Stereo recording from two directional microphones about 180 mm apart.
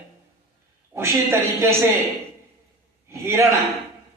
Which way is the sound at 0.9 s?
15° right (ahead or behind).